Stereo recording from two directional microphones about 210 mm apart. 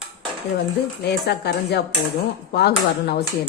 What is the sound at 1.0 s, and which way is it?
Speech, 50° left (ahead or behind).